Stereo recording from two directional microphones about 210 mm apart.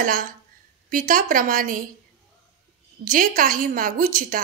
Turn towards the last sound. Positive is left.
turn(degrees=-40)  # may be behind; listen again after turning